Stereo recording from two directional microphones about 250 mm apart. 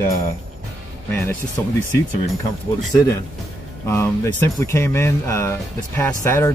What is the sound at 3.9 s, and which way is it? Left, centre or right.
Speech, centre.